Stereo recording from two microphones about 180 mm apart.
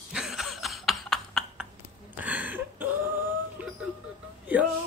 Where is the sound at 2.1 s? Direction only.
10° right (ahead or behind).